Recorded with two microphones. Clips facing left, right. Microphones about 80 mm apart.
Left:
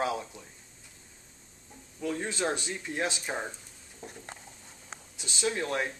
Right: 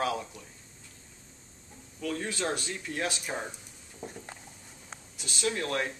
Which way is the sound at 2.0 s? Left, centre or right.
Centre.